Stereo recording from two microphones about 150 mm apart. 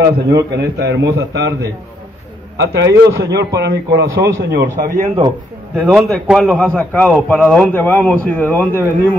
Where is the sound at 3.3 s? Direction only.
90° right.